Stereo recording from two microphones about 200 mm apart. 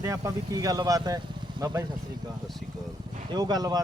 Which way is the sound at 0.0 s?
15° right (ahead or behind).